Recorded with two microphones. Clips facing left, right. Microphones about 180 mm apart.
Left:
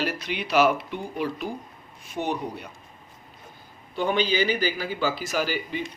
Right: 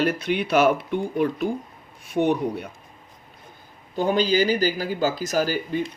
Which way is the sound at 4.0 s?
40° right (ahead or behind).